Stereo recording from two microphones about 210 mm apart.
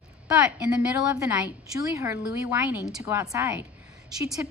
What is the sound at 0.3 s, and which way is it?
A woman's voice, 5° right (ahead or behind).